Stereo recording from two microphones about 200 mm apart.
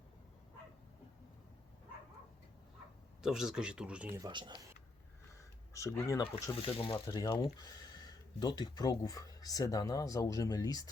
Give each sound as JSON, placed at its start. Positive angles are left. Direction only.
{"t": 3.2, "sound": "speech", "side_deg": 0}
{"t": 4.2, "sound": "speech", "side_deg": -20}
{"t": 5.3, "sound": "a sound", "side_deg": 15}
{"t": 6.6, "sound": "speech", "side_deg": 30}